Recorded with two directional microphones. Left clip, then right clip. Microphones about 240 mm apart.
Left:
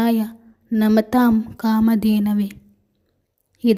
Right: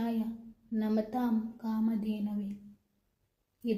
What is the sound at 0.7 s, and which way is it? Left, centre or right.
A woman's voice, left.